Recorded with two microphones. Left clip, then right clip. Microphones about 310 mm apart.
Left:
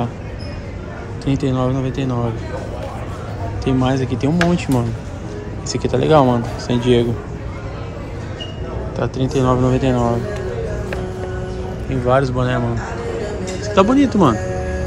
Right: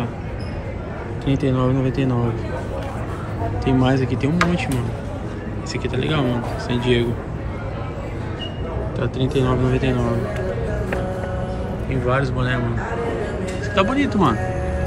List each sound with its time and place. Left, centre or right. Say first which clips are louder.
1.2 s speech: left 1 dB; centre
3.6 s speech: left 1 dB; centre
5.7 s speech: left 9 dB; centre
8.9 s speech: left 3 dB; centre
11.9 s speech: left 6 dB; centre
13.7 s speech: left 5 dB; centre